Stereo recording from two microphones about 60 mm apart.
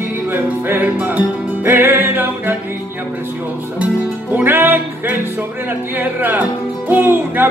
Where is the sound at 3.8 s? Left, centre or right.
Right.